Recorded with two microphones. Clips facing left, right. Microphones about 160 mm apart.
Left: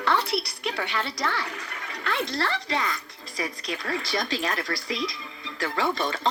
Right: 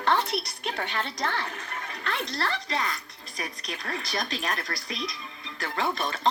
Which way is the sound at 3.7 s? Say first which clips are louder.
Left 4 dB; 35° left (ahead or behind).